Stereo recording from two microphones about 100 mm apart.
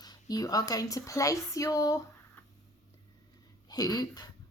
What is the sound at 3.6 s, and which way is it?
Speech, 40° left (ahead or behind).